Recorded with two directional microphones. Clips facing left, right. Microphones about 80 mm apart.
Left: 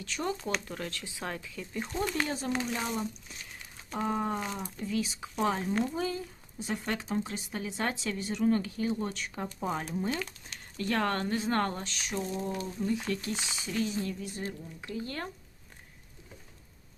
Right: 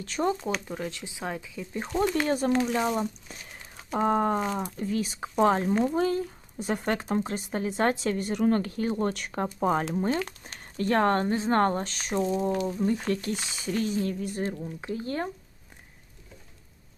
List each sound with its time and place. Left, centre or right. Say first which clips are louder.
0.0 s speech: right 7 dB; right
0.3 s speech: right 3 dB; right
1.8 s speech: right 6 dB; right
9.6 s speech: right 7 dB; right
14.8 s speech: right 4 dB; right